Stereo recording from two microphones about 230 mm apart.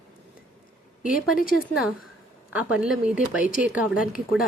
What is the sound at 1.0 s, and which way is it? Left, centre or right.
Speech, left.